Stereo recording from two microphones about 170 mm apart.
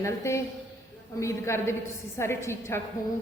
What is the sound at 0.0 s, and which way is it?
A woman's voice, 15° left (ahead or behind).